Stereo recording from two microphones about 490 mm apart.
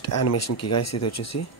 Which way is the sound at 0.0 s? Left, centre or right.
Left.